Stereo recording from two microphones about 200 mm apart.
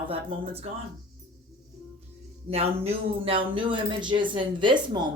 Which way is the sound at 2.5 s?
30° right (ahead or behind).